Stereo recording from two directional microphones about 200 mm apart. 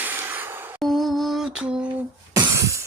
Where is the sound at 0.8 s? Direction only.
Centre (ahead or behind).